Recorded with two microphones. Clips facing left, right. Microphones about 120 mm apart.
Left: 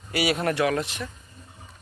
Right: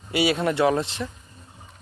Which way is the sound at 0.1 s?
25° right (ahead or behind).